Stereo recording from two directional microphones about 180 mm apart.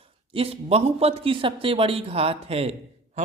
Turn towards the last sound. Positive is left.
turn(degrees=-35)  # may be behind; listen again after turning